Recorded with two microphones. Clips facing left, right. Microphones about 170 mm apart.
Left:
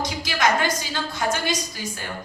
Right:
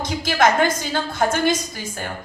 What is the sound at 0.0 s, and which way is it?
A woman's voice, 50° right (ahead or behind).